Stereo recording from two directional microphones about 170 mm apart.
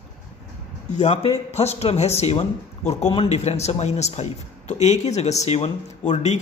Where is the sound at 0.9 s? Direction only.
40° left (ahead or behind).